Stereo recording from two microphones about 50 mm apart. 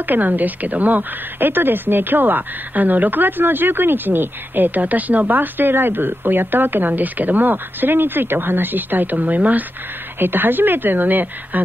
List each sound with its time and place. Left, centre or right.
0.0 s a woman's voice: right